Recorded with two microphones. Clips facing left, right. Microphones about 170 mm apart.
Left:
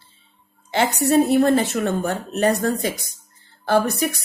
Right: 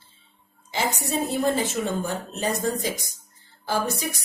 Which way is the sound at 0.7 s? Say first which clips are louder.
Left 9 dB; 65° left (ahead or behind).